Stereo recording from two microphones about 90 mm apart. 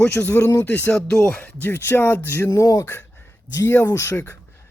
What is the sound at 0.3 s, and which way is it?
Speech, 30° left (ahead or behind).